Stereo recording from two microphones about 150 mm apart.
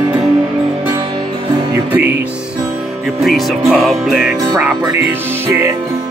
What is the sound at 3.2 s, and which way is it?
Music, centre (ahead or behind).